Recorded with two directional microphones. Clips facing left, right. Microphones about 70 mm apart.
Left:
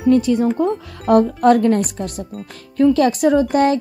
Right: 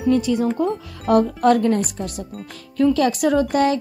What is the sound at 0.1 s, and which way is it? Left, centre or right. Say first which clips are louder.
Speech: left 4 dB; left.